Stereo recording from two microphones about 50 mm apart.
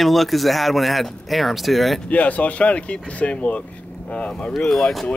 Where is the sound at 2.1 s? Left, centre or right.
Left.